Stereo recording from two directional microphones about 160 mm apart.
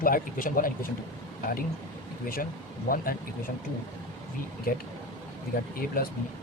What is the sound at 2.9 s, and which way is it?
Speech, 65° left (ahead or behind).